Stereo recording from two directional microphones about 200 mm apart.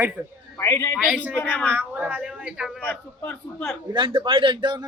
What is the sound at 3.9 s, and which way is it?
Speech, 25° right (ahead or behind).